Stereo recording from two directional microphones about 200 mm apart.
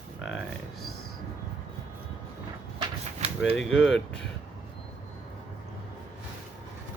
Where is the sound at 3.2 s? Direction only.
35° right (ahead or behind).